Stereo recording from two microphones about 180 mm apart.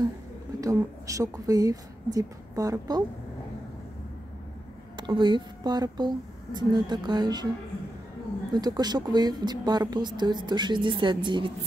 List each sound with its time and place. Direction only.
0.6 s a woman's voice: 20° right (ahead or behind)
4.9 s a woman's voice: 25° right (ahead or behind)
8.5 s a woman's voice: 20° right (ahead or behind)